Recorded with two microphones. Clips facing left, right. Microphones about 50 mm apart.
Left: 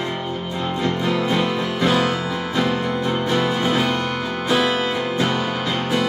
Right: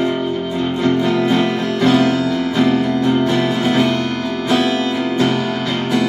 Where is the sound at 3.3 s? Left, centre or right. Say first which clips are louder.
Right 3 dB; centre.